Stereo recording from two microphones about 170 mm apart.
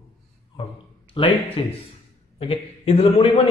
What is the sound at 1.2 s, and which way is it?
A man's voice, 30° left (ahead or behind).